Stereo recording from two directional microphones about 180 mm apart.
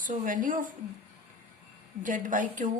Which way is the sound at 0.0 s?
45° right (ahead or behind).